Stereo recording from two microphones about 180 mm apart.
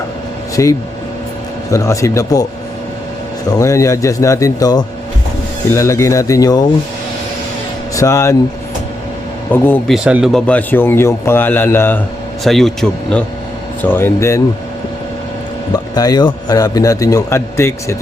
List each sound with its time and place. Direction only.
0.5 s a man's voice: 20° left (ahead or behind)
3.5 s a man's voice: 15° left (ahead or behind)
7.9 s a man's voice: 15° left (ahead or behind)
9.5 s a man's voice: 10° left (ahead or behind)
9.9 s speech: 5° right (ahead or behind)
10.4 s a man's voice: 10° left (ahead or behind)
12.5 s a man's voice: centre (ahead or behind)
15.7 s a man's voice: 20° left (ahead or behind)